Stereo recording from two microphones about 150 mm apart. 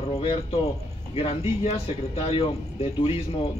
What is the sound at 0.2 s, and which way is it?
Speech, 40° left (ahead or behind).